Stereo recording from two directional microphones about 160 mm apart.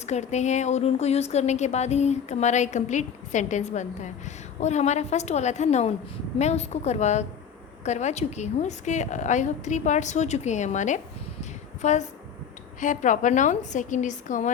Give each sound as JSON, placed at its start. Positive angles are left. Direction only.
{"t": 0.0, "sound": "a woman's voice", "side_deg": 45}